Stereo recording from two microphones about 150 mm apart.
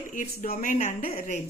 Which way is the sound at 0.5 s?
55° left (ahead or behind).